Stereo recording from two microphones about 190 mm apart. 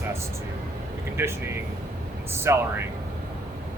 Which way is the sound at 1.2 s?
15° right (ahead or behind).